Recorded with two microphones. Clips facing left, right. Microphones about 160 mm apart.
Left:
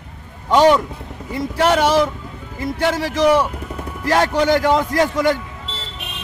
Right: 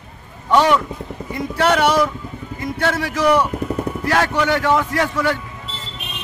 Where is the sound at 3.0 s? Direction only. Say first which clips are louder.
Left 1 dB; 30° left (ahead or behind).